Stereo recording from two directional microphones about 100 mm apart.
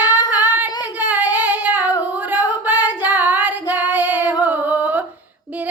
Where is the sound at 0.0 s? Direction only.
45° left (ahead or behind).